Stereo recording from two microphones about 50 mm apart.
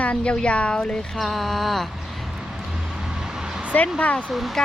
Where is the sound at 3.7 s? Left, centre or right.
Left.